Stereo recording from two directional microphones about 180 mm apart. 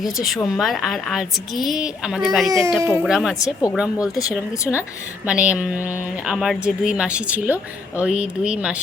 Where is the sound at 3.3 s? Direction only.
20° left (ahead or behind).